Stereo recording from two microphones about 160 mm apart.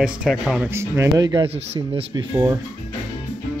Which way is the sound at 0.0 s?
5° right (ahead or behind).